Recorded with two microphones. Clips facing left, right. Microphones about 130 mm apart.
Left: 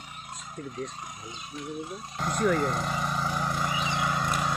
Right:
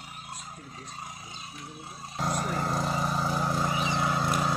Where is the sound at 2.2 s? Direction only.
30° right (ahead or behind).